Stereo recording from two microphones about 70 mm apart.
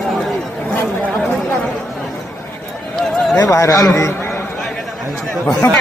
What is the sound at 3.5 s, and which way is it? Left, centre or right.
Speech, left.